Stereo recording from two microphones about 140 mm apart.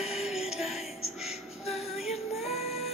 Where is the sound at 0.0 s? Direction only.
5° right (ahead or behind).